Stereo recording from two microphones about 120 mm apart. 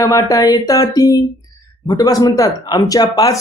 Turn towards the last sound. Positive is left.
turn(degrees=35)  # may be behind; listen again after turning